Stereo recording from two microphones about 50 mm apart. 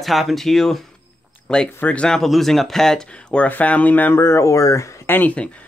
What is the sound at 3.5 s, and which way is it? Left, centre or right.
Speech, left.